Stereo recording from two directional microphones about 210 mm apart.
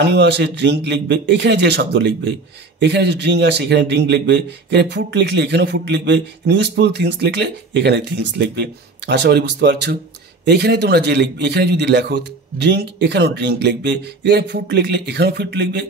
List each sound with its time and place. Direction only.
0.0 s a man's voice: 55° right (ahead or behind)